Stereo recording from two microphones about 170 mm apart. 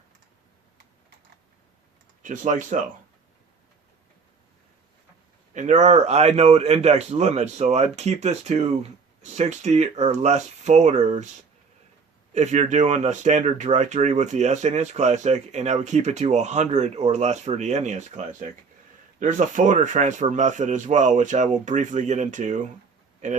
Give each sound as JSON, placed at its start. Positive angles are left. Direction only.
{"t": 2.2, "sound": "speech", "side_deg": -50}
{"t": 5.5, "sound": "speech", "side_deg": -45}
{"t": 12.3, "sound": "speech", "side_deg": -40}